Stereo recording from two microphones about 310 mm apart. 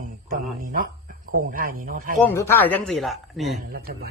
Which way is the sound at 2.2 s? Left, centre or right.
Centre.